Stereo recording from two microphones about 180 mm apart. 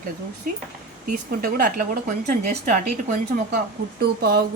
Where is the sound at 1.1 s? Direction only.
50° right (ahead or behind).